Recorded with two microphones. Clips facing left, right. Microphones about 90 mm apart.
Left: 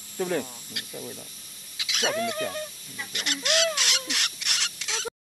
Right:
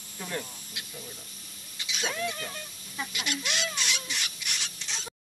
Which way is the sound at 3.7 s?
75° left (ahead or behind).